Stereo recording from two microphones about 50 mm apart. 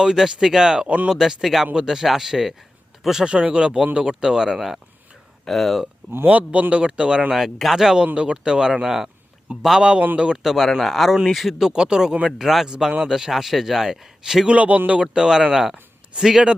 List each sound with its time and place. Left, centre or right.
0.0 s speech: centre
1.1 s speech: centre
3.2 s speech: centre
6.2 s speech: right
7.3 s speech: centre
8.0 s speech: right
9.5 s speech: right
10.4 s speech: centre
12.4 s speech: centre
12.6 s speech: centre
14.4 s speech: right
15.0 s speech: centre